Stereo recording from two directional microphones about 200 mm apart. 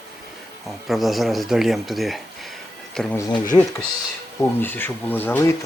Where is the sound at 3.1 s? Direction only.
20° left (ahead or behind).